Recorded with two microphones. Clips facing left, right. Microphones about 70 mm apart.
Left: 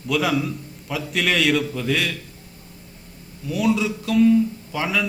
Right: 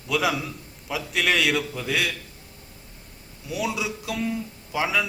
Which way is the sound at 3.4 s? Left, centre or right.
Centre.